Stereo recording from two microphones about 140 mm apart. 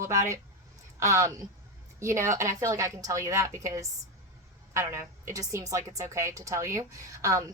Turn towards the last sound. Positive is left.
turn(degrees=-25)  # may be behind; listen again after turning